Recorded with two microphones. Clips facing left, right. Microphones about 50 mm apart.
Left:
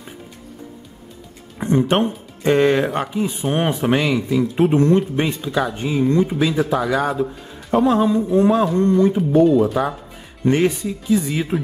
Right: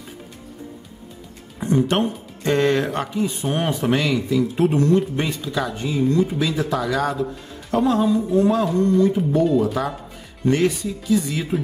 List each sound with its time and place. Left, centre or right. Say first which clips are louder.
1.6 s speech: left 2 dB; left